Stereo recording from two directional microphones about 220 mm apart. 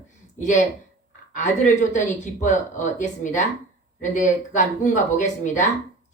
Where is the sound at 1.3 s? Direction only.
35° left (ahead or behind).